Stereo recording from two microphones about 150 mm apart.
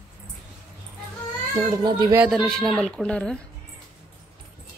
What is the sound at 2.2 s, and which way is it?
A woman's voice, centre (ahead or behind).